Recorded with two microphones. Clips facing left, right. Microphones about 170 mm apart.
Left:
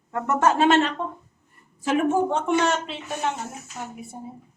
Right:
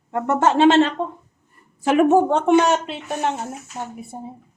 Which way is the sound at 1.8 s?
70° right (ahead or behind).